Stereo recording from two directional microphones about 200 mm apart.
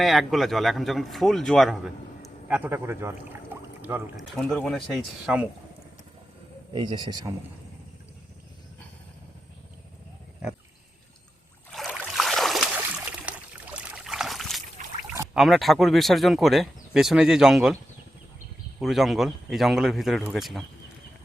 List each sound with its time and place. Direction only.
0.0 s speech: centre (ahead or behind)
2.5 s a man's voice: 10° right (ahead or behind)
4.2 s speech: 5° left (ahead or behind)
6.7 s a man's voice: 20° right (ahead or behind)
11.7 s a sound: centre (ahead or behind)
13.7 s trickle: 5° right (ahead or behind)
14.8 s a sound: 40° right (ahead or behind)
15.3 s speech: centre (ahead or behind)
18.8 s speech: centre (ahead or behind)